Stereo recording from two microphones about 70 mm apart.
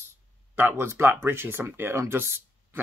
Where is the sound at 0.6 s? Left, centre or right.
Right.